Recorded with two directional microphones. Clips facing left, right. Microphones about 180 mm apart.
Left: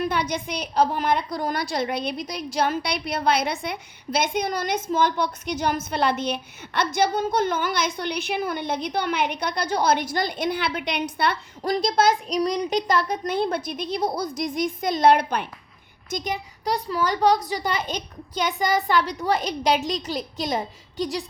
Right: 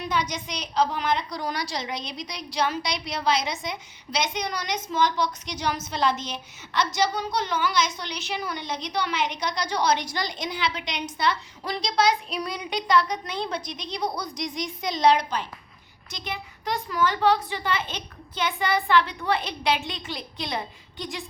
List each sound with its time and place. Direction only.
0.0 s a woman's voice: 55° left (ahead or behind)
12.4 s a woman's voice: 40° left (ahead or behind); by 15.4 s 55° left (ahead or behind)
16.0 s a woman's voice: 45° left (ahead or behind)